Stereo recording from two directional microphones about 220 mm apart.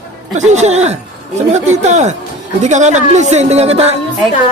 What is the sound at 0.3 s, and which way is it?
Speech, 30° right (ahead or behind).